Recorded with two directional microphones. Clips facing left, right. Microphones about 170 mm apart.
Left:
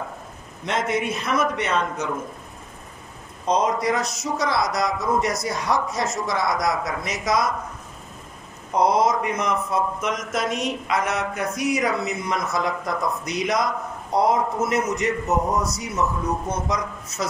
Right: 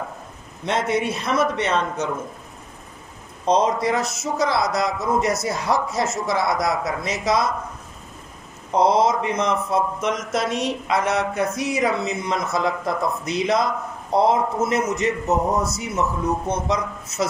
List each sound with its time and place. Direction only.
0.7 s a man's voice: 30° right (ahead or behind)
3.4 s speech: 30° right (ahead or behind)
8.7 s speech: 25° right (ahead or behind)